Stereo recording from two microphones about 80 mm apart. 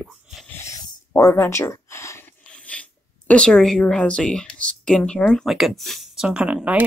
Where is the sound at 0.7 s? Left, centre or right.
Left.